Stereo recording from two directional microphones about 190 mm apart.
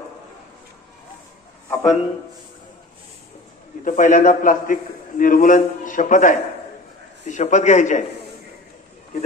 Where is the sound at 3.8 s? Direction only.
40° left (ahead or behind).